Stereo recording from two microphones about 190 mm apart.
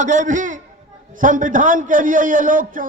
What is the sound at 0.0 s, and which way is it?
A man's voice, 40° right (ahead or behind).